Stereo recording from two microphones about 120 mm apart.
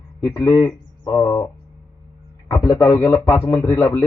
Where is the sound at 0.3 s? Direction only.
20° left (ahead or behind).